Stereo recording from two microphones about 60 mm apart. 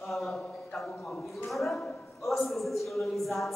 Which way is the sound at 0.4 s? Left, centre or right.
Left.